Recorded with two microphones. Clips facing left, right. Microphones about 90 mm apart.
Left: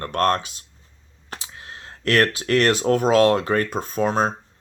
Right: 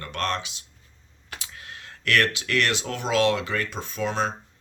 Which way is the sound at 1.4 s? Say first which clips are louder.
Left 2 dB; 30° left (ahead or behind).